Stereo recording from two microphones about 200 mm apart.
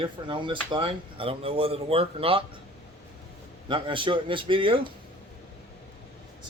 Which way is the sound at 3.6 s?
25° right (ahead or behind).